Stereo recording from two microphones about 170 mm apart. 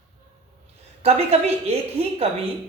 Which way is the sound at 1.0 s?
35° right (ahead or behind).